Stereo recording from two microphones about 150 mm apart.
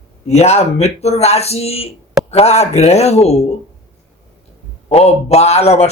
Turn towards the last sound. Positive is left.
turn(degrees=45)  # may be behind; listen again after turning